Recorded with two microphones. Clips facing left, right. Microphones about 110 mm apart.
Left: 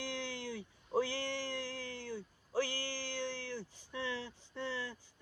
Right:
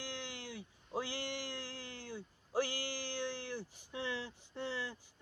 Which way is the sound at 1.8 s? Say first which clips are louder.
Left 4 dB; 15° right (ahead or behind).